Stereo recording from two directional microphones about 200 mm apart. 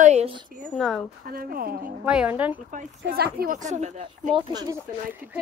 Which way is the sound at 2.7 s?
50° right (ahead or behind).